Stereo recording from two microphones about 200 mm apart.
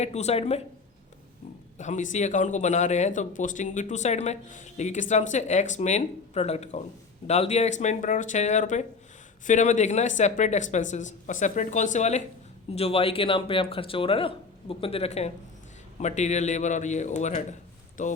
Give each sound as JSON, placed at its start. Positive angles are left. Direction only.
{"t": 0.0, "sound": "a man's voice", "side_deg": 35}
{"t": 1.8, "sound": "a man's voice", "side_deg": 40}